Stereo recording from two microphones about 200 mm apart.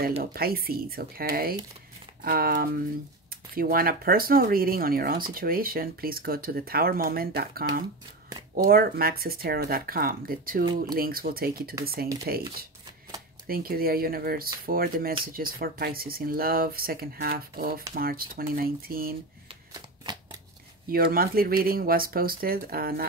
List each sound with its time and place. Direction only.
0.2 s speech: 50° right (ahead or behind)
8.6 s speech: 50° right (ahead or behind)
10.6 s speech: 20° right (ahead or behind)
11.0 s speech: 45° right (ahead or behind)
13.5 s speech: 45° right (ahead or behind)
20.9 s speech: 50° right (ahead or behind)